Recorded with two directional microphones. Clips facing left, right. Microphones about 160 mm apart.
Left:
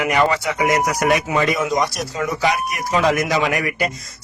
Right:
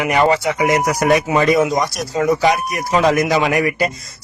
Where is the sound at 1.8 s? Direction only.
Centre (ahead or behind).